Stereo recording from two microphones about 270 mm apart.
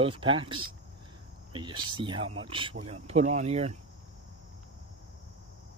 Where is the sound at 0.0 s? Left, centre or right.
Centre.